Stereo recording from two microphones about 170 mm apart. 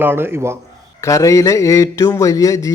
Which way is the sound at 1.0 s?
20° left (ahead or behind).